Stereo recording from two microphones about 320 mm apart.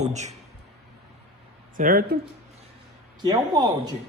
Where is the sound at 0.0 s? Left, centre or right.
Right.